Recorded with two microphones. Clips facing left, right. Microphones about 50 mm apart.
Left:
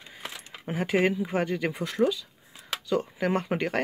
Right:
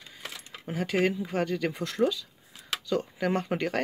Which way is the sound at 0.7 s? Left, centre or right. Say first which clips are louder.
Left 2 dB; centre.